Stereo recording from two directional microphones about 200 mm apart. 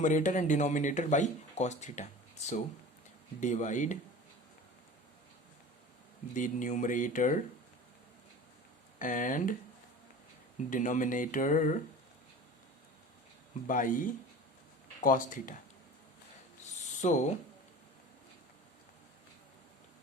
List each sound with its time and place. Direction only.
0.0 s speech: 40° left (ahead or behind)
6.3 s speech: 40° left (ahead or behind)
9.0 s speech: 40° left (ahead or behind)
10.7 s speech: 40° left (ahead or behind)
13.7 s speech: 40° left (ahead or behind)
17.0 s speech: 35° left (ahead or behind)